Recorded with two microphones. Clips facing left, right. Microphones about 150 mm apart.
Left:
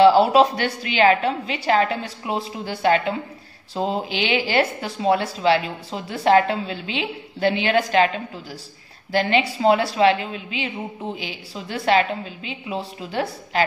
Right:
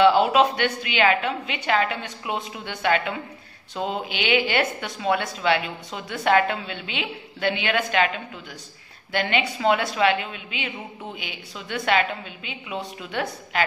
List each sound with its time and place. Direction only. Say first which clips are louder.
0.0 s speech: left 3 dB; 35° left (ahead or behind)
9.1 s speech: left 4 dB; 35° left (ahead or behind)